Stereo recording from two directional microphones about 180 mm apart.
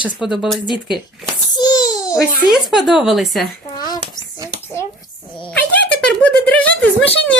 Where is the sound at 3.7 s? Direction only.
20° left (ahead or behind).